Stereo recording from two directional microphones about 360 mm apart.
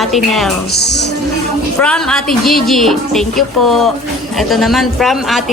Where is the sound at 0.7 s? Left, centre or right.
Left.